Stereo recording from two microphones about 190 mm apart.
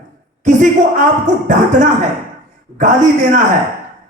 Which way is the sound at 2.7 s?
40° right (ahead or behind).